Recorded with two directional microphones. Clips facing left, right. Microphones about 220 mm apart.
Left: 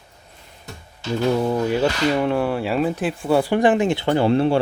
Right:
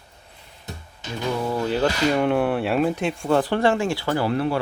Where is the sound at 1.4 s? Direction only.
20° left (ahead or behind).